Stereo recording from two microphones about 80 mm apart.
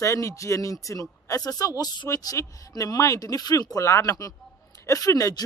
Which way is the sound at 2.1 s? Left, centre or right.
Left.